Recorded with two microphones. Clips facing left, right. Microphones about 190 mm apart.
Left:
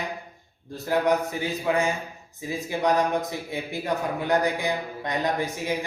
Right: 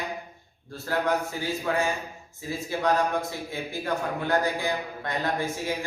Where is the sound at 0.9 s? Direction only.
15° left (ahead or behind).